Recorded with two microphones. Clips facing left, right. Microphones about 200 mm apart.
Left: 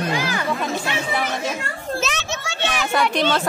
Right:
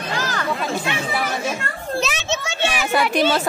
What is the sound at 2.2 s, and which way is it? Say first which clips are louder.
Children playing: right 3 dB; 20° right (ahead or behind).